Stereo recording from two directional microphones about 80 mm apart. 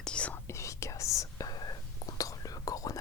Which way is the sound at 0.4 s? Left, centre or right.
Left.